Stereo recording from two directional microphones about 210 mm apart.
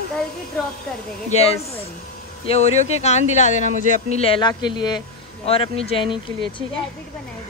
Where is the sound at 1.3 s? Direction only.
30° left (ahead or behind).